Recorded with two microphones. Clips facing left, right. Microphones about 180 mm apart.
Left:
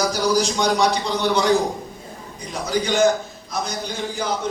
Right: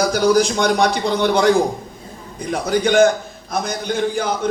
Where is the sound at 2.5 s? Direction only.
55° right (ahead or behind).